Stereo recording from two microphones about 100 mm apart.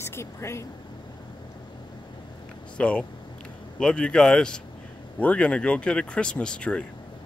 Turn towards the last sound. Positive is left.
turn(degrees=10)  # may be behind; listen again after turning